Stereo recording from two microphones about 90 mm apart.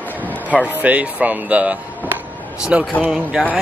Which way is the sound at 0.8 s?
15° right (ahead or behind).